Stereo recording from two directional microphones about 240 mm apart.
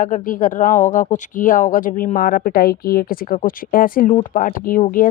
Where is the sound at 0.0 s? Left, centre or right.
Left.